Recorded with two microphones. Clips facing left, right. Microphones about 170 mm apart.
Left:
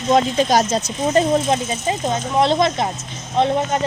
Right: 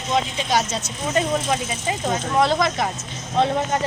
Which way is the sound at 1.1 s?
30° left (ahead or behind).